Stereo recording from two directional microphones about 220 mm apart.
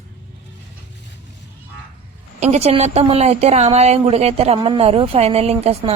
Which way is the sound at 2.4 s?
30° right (ahead or behind).